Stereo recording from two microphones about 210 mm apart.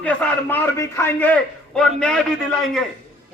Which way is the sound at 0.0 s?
5° left (ahead or behind).